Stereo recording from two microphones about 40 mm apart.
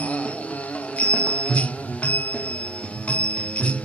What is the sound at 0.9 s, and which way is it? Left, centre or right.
Music, left.